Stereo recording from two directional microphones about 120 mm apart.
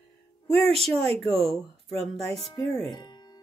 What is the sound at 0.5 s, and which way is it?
Speech, 55° right (ahead or behind).